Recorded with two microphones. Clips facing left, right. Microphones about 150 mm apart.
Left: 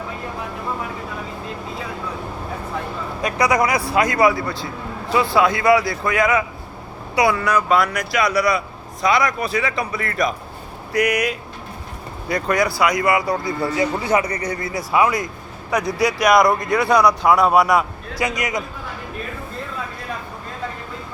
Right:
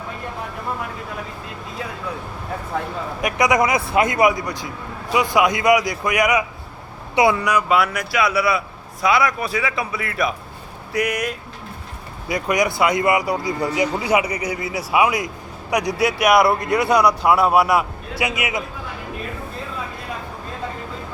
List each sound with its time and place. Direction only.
3.2 s a man's voice: 20° right (ahead or behind); by 11.3 s centre (ahead or behind)
12.3 s a man's voice: 15° right (ahead or behind)